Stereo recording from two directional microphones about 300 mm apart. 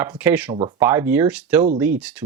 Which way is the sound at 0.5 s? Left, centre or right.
Centre.